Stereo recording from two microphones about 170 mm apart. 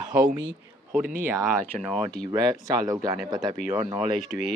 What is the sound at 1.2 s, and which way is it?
Speech, 15° right (ahead or behind).